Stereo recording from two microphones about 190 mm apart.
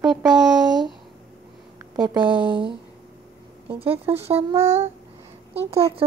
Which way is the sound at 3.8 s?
10° right (ahead or behind).